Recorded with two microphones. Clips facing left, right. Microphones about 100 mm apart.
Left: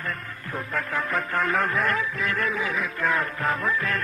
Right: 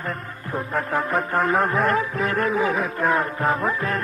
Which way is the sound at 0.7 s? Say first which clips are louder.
Right 4 dB; 30° right (ahead or behind).